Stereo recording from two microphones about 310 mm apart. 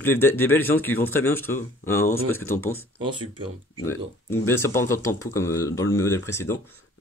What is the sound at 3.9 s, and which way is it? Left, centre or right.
Speech, centre.